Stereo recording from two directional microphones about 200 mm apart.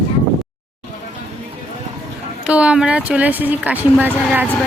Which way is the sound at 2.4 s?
5° right (ahead or behind).